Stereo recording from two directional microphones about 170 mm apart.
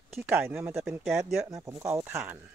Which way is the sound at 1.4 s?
20° right (ahead or behind).